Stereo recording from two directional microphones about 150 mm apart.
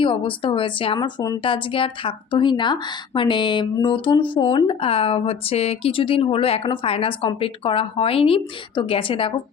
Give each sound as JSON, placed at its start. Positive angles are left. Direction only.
{"t": 0.0, "sound": "speech", "side_deg": 35}